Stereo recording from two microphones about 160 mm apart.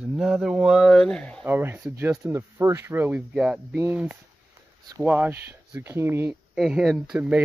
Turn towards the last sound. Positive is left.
turn(degrees=-10)  # may be behind; listen again after turning